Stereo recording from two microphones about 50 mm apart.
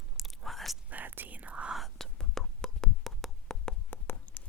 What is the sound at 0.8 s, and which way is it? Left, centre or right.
Whispering, right.